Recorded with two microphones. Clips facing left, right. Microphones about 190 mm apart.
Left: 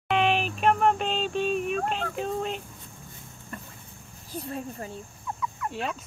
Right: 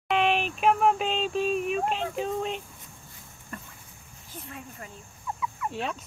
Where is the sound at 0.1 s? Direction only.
Centre (ahead or behind).